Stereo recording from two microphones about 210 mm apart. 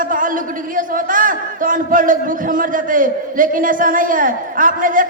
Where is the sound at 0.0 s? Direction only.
40° right (ahead or behind).